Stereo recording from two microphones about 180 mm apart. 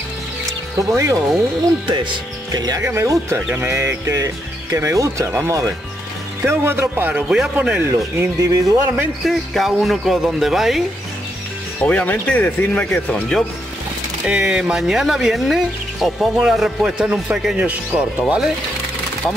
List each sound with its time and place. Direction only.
0.5 s music: 20° right (ahead or behind)
1.9 s speech: 25° right (ahead or behind)
9.2 s speech: centre (ahead or behind)
11.8 s speech: 5° left (ahead or behind)
14.2 s speech: 5° right (ahead or behind)